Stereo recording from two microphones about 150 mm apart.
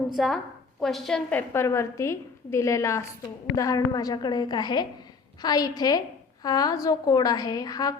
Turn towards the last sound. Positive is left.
turn(degrees=25)  # may be behind; listen again after turning